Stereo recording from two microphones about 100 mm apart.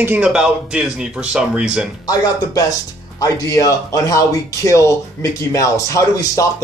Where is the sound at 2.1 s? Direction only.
35° left (ahead or behind).